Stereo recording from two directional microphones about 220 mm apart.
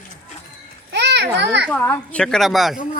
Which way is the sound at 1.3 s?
50° right (ahead or behind).